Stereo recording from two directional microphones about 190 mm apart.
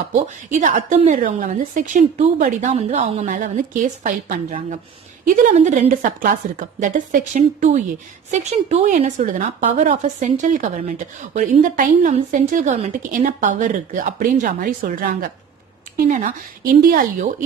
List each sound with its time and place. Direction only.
0.1 s a woman's voice: 40° right (ahead or behind)